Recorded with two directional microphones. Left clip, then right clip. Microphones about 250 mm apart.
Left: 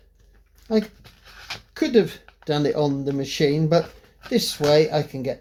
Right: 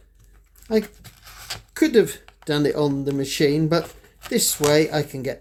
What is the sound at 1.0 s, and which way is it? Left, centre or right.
Writing, right.